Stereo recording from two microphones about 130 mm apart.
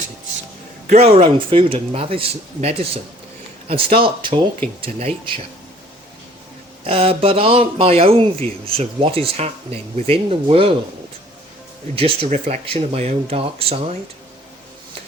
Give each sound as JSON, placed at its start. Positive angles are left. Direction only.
{"t": 0.9, "sound": "speech", "side_deg": -55}
{"t": 6.8, "sound": "speech", "side_deg": -45}
{"t": 11.9, "sound": "speech", "side_deg": -45}